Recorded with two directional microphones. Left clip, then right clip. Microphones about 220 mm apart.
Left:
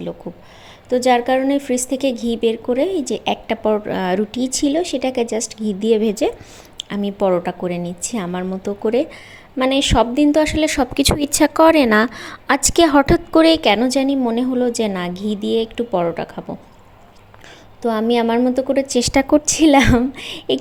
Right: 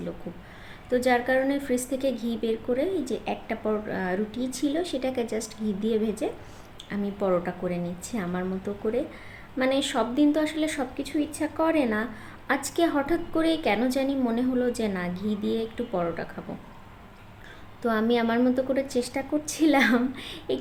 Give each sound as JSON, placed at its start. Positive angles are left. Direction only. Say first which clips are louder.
{"t": 0.9, "sound": "a woman's voice", "louder": "left 8 dB", "side_deg": 30}
{"t": 17.8, "sound": "a woman's voice", "louder": "left 7 dB", "side_deg": 30}